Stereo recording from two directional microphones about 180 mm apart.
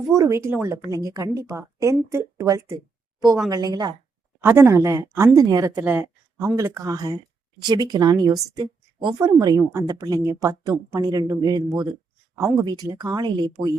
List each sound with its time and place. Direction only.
0.1 s a woman's voice: 15° right (ahead or behind)
4.4 s a woman's voice: 15° right (ahead or behind)